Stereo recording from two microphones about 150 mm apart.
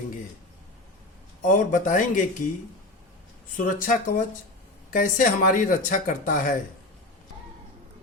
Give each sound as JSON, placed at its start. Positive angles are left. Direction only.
{"t": 1.4, "sound": "speech", "side_deg": 60}
{"t": 3.8, "sound": "speech", "side_deg": 65}